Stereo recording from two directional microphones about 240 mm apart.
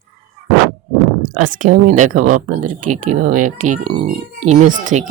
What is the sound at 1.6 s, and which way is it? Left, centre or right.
Speech, right.